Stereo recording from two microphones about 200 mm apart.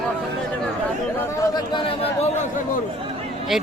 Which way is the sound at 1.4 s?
20° left (ahead or behind).